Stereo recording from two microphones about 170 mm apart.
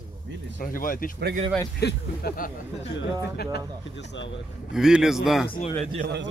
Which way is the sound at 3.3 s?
80° left.